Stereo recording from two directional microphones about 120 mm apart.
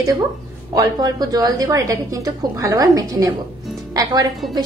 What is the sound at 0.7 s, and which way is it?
A woman's voice, 35° right (ahead or behind).